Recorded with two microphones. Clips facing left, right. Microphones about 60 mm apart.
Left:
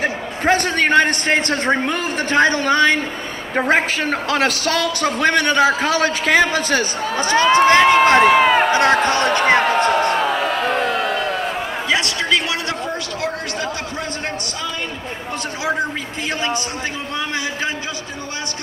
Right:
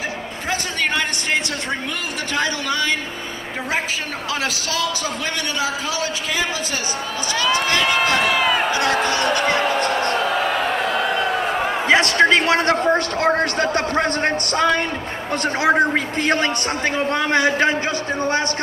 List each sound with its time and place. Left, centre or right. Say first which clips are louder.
0.5 s a man's voice: left 7 dB; left
7.2 s a man's voice: left 8 dB; left
10.5 s a sound: left 1 dB; centre
11.9 s a man's voice: right 5 dB; right